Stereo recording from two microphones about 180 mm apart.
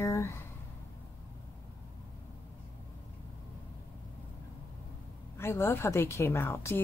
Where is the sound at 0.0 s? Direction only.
15° left (ahead or behind).